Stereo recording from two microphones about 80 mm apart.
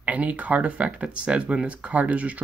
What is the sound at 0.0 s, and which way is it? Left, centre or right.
Speech, centre.